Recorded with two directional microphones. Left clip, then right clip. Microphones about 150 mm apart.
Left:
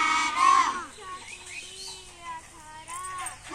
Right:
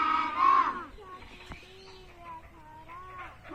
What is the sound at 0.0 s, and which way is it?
Battle cry, 15° left (ahead or behind).